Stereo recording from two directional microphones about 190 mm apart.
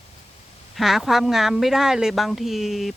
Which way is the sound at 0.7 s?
Centre (ahead or behind).